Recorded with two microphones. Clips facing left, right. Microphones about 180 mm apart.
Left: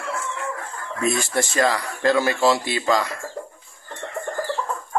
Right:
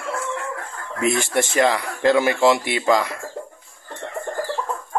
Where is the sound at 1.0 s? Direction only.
20° right (ahead or behind).